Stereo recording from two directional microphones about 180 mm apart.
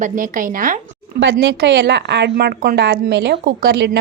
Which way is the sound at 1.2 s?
65° right (ahead or behind).